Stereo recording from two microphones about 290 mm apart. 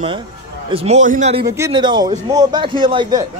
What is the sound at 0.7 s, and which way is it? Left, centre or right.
A man's voice, right.